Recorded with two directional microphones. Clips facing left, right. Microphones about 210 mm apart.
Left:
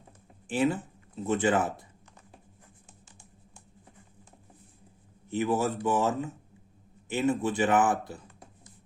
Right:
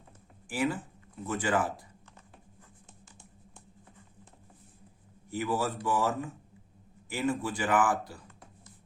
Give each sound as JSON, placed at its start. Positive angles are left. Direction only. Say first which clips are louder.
{"t": 0.4, "sound": "speech", "louder": "left 4 dB", "side_deg": 25}
{"t": 5.3, "sound": "speech", "louder": "left 4 dB", "side_deg": 20}